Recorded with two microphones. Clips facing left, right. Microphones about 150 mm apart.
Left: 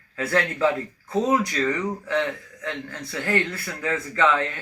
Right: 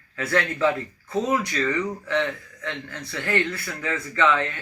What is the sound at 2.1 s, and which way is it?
Speech, 40° left (ahead or behind).